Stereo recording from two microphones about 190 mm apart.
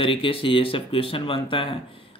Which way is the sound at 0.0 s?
30° left (ahead or behind).